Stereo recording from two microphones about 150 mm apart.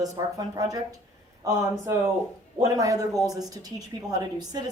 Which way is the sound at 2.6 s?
25° right (ahead or behind).